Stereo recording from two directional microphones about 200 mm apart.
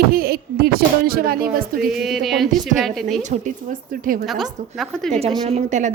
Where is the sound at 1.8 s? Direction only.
Centre (ahead or behind).